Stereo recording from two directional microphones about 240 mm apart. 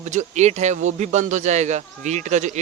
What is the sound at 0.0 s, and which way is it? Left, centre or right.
A man's voice, right.